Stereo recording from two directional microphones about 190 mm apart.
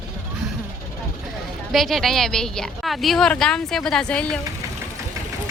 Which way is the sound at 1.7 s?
Centre (ahead or behind).